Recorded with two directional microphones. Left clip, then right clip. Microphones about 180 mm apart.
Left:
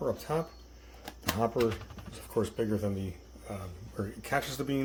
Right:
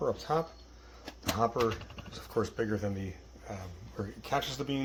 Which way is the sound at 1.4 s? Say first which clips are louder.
Even; 25° left (ahead or behind).